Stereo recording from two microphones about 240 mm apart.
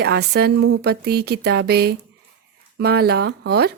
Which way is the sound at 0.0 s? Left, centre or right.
Right.